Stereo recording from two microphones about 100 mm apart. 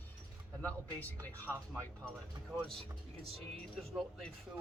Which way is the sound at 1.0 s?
15° left (ahead or behind).